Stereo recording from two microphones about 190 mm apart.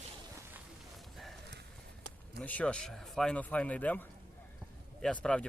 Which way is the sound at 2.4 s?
5° left (ahead or behind).